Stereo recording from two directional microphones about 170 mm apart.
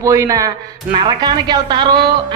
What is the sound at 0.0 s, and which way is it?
Speech, 20° right (ahead or behind).